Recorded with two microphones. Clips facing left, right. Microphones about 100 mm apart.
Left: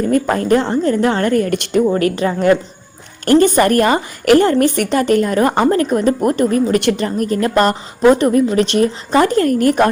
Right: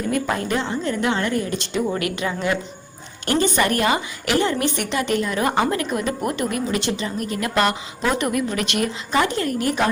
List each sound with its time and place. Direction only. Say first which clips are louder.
0.1 s a woman's voice: left 8 dB; 45° left (ahead or behind); by 1.8 s 60° left (ahead or behind)
1.9 s a woman's voice: left 8 dB; 40° left (ahead or behind)
6.7 s a woman's voice: left 9 dB; 55° left (ahead or behind)